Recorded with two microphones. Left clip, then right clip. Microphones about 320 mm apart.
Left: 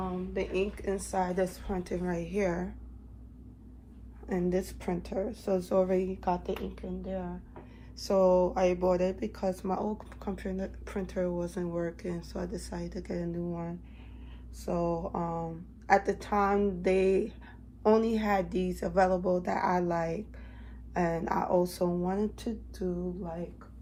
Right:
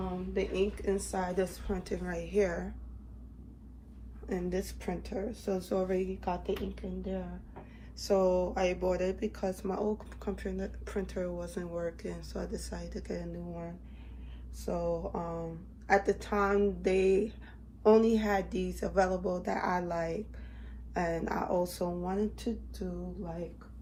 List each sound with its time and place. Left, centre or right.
0.3 s speech: left
4.3 s speech: left
7.9 s speech: centre